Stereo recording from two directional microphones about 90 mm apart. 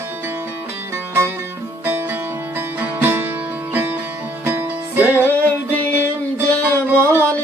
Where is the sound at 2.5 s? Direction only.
20° right (ahead or behind).